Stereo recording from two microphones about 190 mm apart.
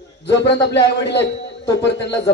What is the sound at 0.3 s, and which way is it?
A man's voice, 65° left (ahead or behind).